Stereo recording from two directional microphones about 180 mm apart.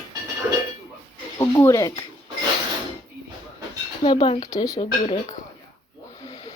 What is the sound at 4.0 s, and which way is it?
Speech, 30° left (ahead or behind).